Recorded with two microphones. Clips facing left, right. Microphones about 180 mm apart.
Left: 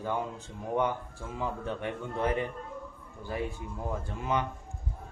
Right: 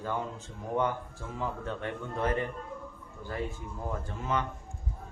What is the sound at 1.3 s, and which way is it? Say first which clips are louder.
A man's voice: left 1 dB; 15° left (ahead or behind).